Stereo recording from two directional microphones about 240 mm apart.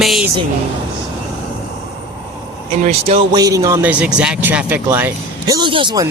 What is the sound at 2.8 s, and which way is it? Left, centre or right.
Speech, right.